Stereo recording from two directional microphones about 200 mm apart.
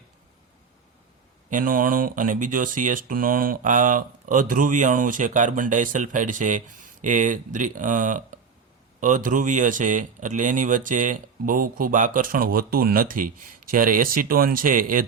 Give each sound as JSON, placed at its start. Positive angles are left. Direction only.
{"t": 1.5, "sound": "speech", "side_deg": -45}